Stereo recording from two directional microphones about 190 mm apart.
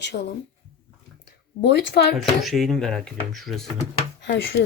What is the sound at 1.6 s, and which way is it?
Speech, 60° left (ahead or behind).